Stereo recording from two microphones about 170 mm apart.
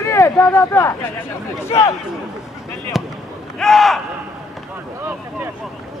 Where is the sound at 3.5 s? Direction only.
Centre (ahead or behind).